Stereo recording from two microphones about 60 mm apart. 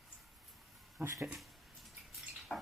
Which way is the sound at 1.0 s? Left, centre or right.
Right.